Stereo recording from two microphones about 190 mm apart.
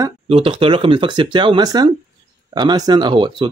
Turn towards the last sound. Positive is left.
turn(degrees=-25)  # may be behind; listen again after turning